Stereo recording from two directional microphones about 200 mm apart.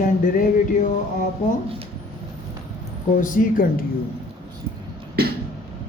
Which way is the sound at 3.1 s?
40° left (ahead or behind).